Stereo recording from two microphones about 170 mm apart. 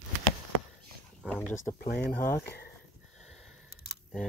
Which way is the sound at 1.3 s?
10° left (ahead or behind).